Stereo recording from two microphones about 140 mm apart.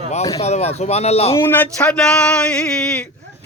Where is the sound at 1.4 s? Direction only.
15° left (ahead or behind).